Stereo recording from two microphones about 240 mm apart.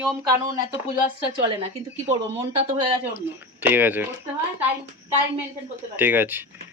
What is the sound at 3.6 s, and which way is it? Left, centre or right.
Speech, centre.